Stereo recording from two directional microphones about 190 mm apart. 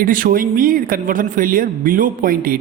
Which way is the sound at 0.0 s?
45° right (ahead or behind).